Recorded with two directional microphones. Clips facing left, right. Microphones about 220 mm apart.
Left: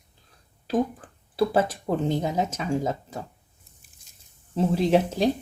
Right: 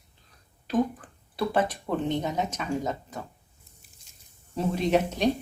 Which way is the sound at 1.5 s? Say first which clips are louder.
Left 3 dB; 30° left (ahead or behind).